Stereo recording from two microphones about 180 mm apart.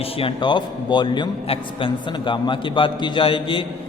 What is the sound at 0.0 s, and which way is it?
A man's voice, 30° left (ahead or behind).